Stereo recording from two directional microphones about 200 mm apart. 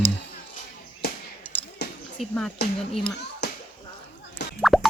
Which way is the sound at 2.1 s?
5° left (ahead or behind).